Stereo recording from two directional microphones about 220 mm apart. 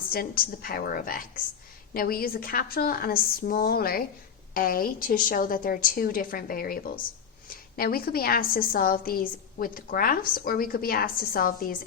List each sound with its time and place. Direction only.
0.1 s a woman's voice: 40° left (ahead or behind)